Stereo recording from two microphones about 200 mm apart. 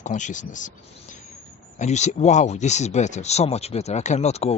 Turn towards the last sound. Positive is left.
turn(degrees=30)  # may be behind; listen again after turning